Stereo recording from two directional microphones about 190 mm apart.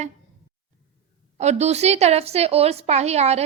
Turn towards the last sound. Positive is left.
turn(degrees=-35)  # may be behind; listen again after turning